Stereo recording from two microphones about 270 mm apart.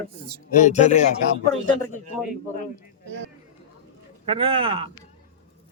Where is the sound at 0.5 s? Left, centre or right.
Left.